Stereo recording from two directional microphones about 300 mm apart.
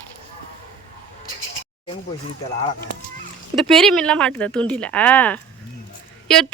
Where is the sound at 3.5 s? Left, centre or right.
Centre.